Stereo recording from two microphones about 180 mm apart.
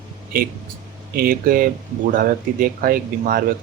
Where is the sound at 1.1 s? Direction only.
55° right (ahead or behind).